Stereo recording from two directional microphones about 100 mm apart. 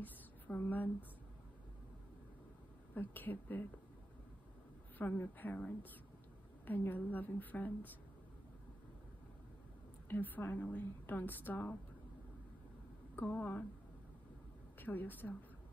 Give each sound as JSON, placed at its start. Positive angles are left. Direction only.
{"t": 0.0, "sound": "a sound", "side_deg": 20}
{"t": 2.9, "sound": "a woman's voice", "side_deg": 20}
{"t": 4.9, "sound": "a woman's voice", "side_deg": 20}
{"t": 10.0, "sound": "a woman's voice", "side_deg": 20}
{"t": 13.1, "sound": "a woman's voice", "side_deg": 15}
{"t": 14.8, "sound": "a woman's voice", "side_deg": 20}